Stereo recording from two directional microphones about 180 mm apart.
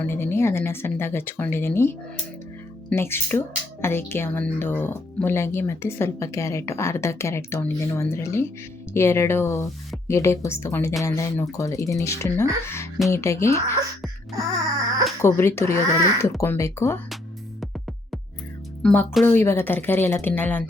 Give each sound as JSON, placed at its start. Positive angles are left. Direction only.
{"t": 0.0, "sound": "speech", "side_deg": 10}
{"t": 15.2, "sound": "speech", "side_deg": 15}
{"t": 18.8, "sound": "speech", "side_deg": 5}